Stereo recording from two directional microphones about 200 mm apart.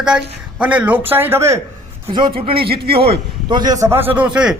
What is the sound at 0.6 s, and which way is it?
A man's voice, 5° right (ahead or behind).